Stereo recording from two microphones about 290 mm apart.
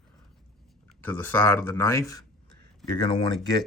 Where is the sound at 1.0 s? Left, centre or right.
Centre.